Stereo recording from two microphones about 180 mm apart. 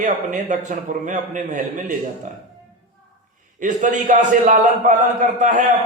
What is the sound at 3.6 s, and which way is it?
A man's voice, 45° right (ahead or behind).